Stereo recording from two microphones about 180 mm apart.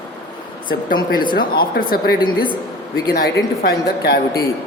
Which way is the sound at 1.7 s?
55° left (ahead or behind).